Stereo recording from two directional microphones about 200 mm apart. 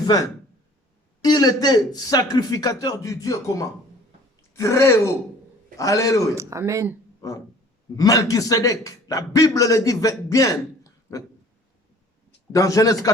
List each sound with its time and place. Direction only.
0.0 s a man's voice: 20° left (ahead or behind)
6.3 s speech: 15° right (ahead or behind)
7.2 s music: 15° left (ahead or behind)
7.9 s a man's voice: 15° left (ahead or behind)
12.5 s a man's voice: 15° left (ahead or behind)